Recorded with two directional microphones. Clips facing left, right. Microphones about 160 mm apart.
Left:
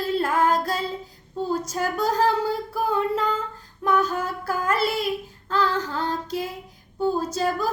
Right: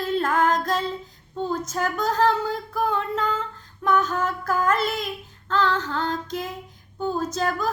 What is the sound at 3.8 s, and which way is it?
Child singing, 10° left (ahead or behind).